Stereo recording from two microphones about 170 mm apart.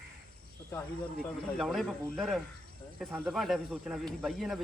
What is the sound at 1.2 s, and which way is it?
Speech, centre (ahead or behind).